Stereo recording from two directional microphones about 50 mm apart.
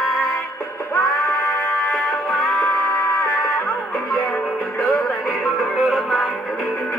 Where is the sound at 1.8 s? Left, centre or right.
Centre.